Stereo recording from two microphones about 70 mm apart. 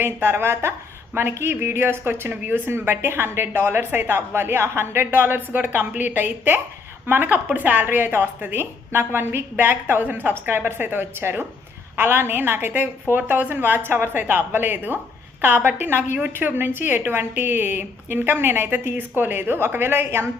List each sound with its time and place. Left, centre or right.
0.0 s a woman's voice: right
2.3 s a woman's voice: right
2.6 s a woman's voice: right